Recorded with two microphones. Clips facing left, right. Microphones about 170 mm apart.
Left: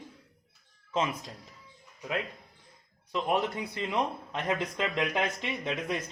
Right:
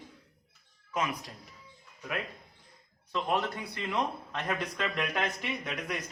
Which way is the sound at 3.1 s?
20° left (ahead or behind).